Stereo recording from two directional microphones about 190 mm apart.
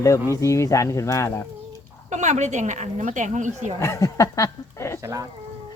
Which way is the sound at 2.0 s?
40° right (ahead or behind).